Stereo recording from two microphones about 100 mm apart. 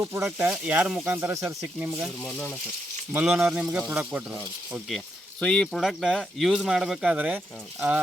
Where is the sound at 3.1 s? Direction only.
15° right (ahead or behind).